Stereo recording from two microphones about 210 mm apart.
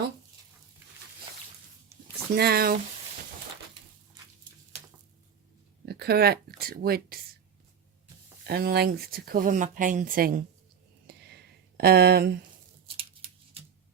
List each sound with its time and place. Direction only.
2.3 s speech: 50° right (ahead or behind)
5.8 s speech: 50° right (ahead or behind)
8.4 s speech: 50° right (ahead or behind)
11.1 s a sound: 50° right (ahead or behind)
11.8 s speech: 50° right (ahead or behind)
13.0 s a sound: 25° right (ahead or behind)